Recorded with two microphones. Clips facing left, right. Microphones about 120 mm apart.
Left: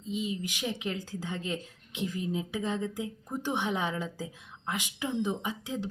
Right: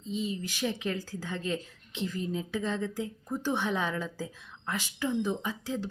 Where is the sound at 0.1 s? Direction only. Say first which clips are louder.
Even; 15° left (ahead or behind).